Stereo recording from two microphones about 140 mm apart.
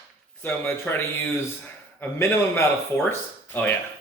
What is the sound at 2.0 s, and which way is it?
A man's voice, 15° left (ahead or behind).